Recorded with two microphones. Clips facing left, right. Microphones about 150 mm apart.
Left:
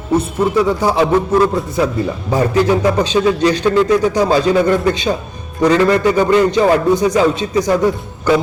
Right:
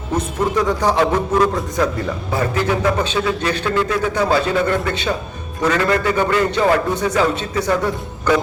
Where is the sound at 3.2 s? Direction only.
35° left (ahead or behind).